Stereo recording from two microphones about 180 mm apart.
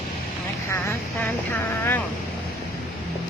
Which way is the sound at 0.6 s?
15° left (ahead or behind).